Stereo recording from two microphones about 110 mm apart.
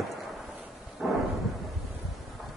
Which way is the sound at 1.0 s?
Centre (ahead or behind).